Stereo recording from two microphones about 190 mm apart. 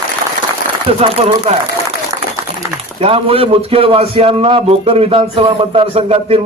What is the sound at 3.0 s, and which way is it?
A man's voice, 30° right (ahead or behind).